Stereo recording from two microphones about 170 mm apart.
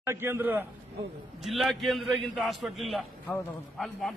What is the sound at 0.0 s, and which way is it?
Speech, 15° right (ahead or behind).